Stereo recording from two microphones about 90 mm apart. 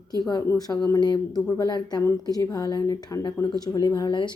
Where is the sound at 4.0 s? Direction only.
60° left (ahead or behind).